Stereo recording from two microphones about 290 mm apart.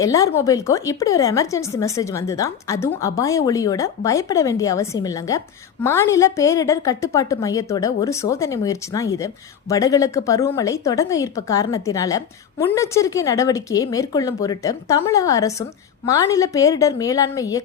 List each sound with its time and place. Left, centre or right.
0.0 s a woman's voice: centre